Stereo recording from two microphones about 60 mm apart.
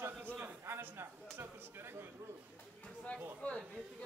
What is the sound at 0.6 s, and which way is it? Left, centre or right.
Speech, right.